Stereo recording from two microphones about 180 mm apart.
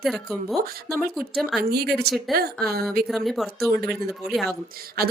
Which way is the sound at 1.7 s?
60° right (ahead or behind).